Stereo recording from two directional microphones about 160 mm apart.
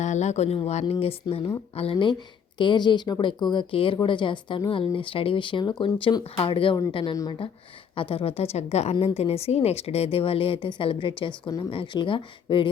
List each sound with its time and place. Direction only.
0.0 s speech: 45° left (ahead or behind); by 12.6 s 30° left (ahead or behind)